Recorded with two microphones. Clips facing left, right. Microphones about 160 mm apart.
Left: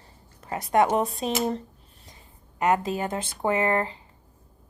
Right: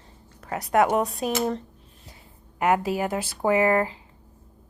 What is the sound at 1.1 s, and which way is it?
Speech, 25° left (ahead or behind).